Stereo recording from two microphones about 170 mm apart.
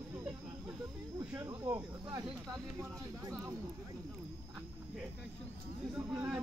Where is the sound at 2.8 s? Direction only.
15° right (ahead or behind).